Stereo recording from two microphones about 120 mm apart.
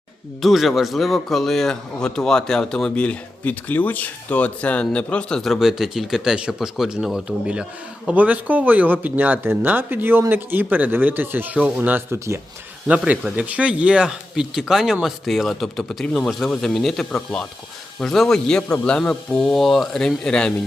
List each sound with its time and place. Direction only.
0.4 s a man's voice: centre (ahead or behind); by 12.4 s 20° right (ahead or behind)
12.9 s a man's voice: 10° right (ahead or behind); by 20.5 s 5° left (ahead or behind)